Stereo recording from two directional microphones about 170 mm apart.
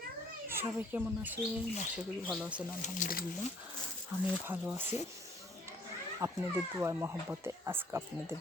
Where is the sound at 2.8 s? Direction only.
55° left (ahead or behind).